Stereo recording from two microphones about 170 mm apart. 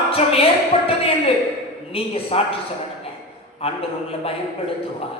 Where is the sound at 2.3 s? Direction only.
35° left (ahead or behind).